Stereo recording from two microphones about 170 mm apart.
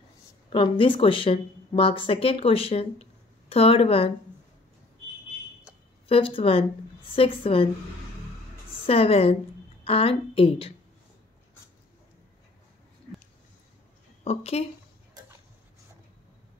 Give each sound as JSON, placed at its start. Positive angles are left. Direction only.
{"t": 0.5, "sound": "speech", "side_deg": 30}
{"t": 6.0, "sound": "a woman's voice", "side_deg": 30}
{"t": 8.8, "sound": "a woman's voice", "side_deg": 35}
{"t": 14.2, "sound": "a woman's voice", "side_deg": 40}